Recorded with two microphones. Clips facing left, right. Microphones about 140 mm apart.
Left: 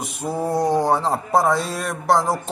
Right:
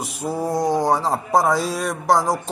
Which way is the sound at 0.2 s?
5° left (ahead or behind).